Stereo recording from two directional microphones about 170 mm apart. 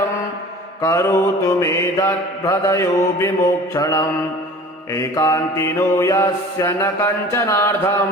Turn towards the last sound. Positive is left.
turn(degrees=15)  # may be behind; listen again after turning